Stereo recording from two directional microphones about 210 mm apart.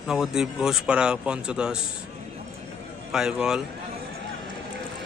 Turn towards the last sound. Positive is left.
turn(degrees=-5)  # may be behind; listen again after turning